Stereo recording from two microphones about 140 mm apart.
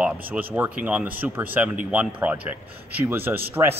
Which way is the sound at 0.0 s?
10° right (ahead or behind).